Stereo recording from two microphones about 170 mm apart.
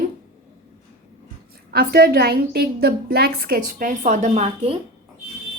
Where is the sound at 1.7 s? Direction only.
65° right (ahead or behind); by 4.5 s 40° right (ahead or behind).